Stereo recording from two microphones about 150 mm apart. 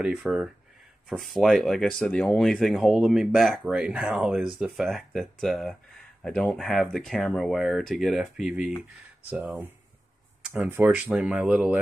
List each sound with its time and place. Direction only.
0.0 s speech: 5° right (ahead or behind)